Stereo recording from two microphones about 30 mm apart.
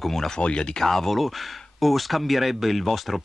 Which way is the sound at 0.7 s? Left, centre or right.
Centre.